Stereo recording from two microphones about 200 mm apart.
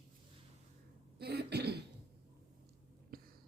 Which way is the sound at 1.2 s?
55° right (ahead or behind).